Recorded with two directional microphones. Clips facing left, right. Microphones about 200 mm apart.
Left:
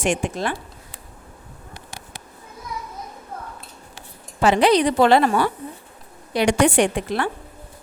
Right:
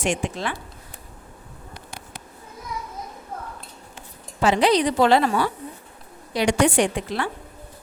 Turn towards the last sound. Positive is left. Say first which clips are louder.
# left 2 dB
turn(degrees=55)  # may be behind; listen again after turning